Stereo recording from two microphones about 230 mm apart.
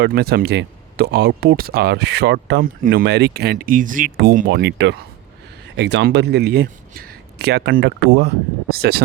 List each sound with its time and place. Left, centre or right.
0.0 s speech: right